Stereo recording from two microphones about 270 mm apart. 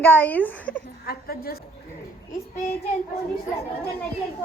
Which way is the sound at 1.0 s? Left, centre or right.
Left.